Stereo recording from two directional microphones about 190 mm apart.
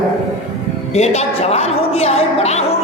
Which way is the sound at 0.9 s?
35° left (ahead or behind).